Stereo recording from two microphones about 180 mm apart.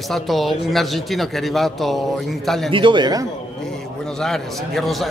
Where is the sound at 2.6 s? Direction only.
30° right (ahead or behind).